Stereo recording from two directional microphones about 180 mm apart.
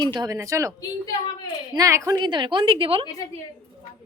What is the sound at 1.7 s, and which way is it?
A woman's voice, 20° right (ahead or behind).